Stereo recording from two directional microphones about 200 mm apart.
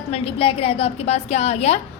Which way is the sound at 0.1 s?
30° left (ahead or behind).